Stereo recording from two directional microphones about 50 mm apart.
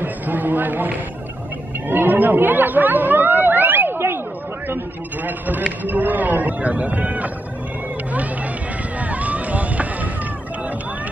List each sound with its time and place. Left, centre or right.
0.0 s a sound: right
1.9 s chatter: right
5.2 s a man's voice: right
9.0 s run: right